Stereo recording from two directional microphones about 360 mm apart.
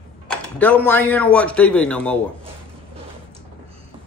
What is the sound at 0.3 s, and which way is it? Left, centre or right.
Speech, centre.